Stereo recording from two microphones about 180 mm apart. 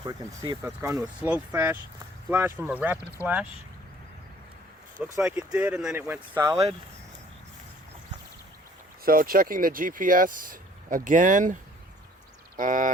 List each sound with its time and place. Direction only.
0.0 s speech: 20° right (ahead or behind)
5.2 s speech: 5° right (ahead or behind)
9.0 s speech: 55° right (ahead or behind)
12.5 s speech: 50° right (ahead or behind)